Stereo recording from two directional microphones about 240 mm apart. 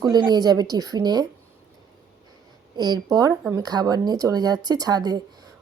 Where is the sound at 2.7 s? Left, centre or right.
Centre.